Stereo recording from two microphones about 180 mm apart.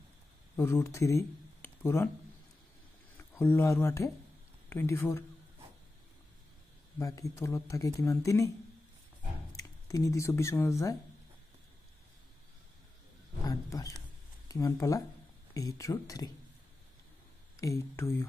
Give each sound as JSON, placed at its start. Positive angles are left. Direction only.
{"t": 0.6, "sound": "speech", "side_deg": 15}
{"t": 3.3, "sound": "speech", "side_deg": 10}
{"t": 7.0, "sound": "speech", "side_deg": 20}
{"t": 9.6, "sound": "speech", "side_deg": 20}
{"t": 13.5, "sound": "wild animals", "side_deg": 20}
{"t": 14.5, "sound": "speech", "side_deg": 20}
{"t": 17.6, "sound": "speech", "side_deg": 15}